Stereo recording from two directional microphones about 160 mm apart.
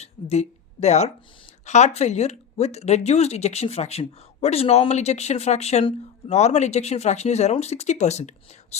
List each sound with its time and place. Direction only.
0.0 s speech: 40° left (ahead or behind)